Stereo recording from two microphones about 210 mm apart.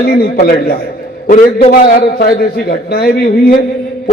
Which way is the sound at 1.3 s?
35° left (ahead or behind).